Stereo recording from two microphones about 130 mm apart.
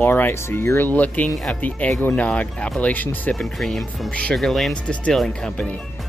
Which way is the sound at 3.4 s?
Centre (ahead or behind).